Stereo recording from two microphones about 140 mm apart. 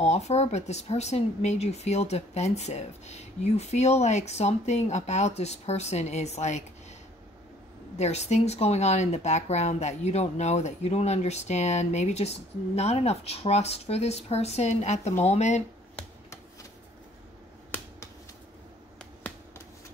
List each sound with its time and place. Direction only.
0.0 s speech: 50° left (ahead or behind)
8.0 s speech: 50° left (ahead or behind)
19.2 s finger snapping: 15° left (ahead or behind)